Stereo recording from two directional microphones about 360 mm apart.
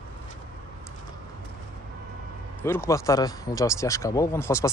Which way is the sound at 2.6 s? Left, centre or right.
Centre.